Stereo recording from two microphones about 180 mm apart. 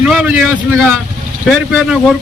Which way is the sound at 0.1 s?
5° right (ahead or behind).